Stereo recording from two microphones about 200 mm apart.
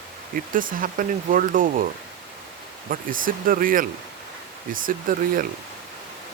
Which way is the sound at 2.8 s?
45° right (ahead or behind).